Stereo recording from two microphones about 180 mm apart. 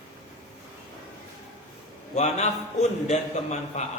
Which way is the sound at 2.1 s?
40° left (ahead or behind).